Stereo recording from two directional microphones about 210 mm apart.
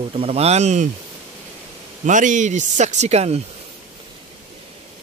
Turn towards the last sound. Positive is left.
turn(degrees=-30)  # may be behind; listen again after turning